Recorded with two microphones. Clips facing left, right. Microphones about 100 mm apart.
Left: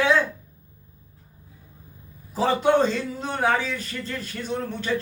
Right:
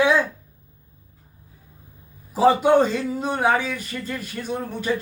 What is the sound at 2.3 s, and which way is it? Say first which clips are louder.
A man's voice: right 4 dB; 15° right (ahead or behind).